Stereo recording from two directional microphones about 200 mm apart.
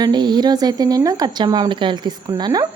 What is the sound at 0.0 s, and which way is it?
Speech, 20° right (ahead or behind).